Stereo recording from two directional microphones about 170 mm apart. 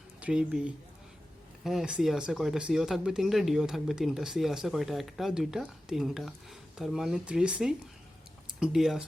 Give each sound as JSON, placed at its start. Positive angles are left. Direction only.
{"t": 0.2, "sound": "speech", "side_deg": -5}